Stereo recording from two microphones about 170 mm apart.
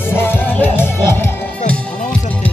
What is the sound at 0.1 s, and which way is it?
Music, 15° left (ahead or behind).